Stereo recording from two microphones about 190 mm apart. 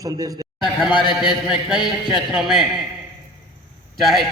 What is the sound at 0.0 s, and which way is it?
Speech, 20° right (ahead or behind).